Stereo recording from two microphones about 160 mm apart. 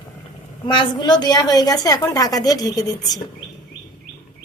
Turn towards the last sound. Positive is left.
turn(degrees=25)  # may be behind; listen again after turning